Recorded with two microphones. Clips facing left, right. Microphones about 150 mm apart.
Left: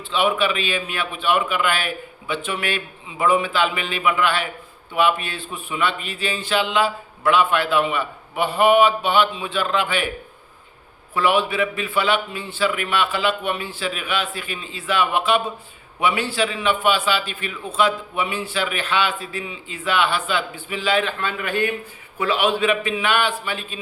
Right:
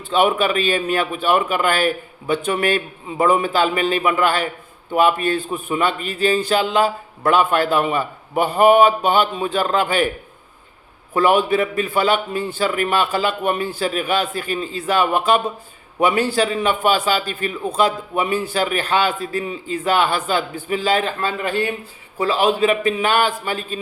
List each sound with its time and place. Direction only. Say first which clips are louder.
0.1 s a man's voice: right 4 dB; 45° right (ahead or behind)
11.1 s a man's voice: right 4 dB; 45° right (ahead or behind)